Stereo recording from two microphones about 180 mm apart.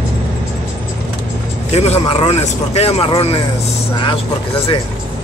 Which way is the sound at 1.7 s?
35° left (ahead or behind).